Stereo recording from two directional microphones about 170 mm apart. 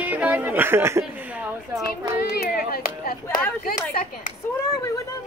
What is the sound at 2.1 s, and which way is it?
Speech, 65° left (ahead or behind).